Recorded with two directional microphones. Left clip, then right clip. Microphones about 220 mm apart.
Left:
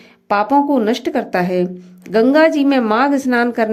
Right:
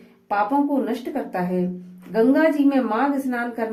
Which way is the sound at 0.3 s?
45° left (ahead or behind).